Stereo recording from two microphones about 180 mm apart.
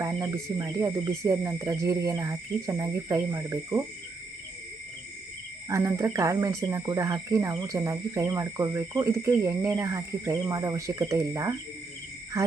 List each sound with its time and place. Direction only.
0.0 s speech: 20° right (ahead or behind)
5.6 s speech: 15° right (ahead or behind)